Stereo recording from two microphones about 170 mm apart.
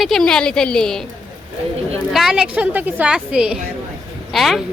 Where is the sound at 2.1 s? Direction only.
Centre (ahead or behind).